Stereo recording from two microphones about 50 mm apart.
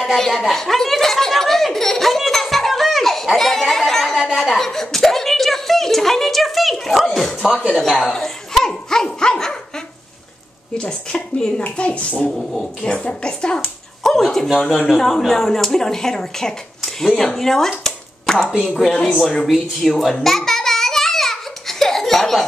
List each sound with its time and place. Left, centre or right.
0.0 s a woman's voice: centre
10.8 s speech: left
14.0 s speech: centre
19.4 s a sound: centre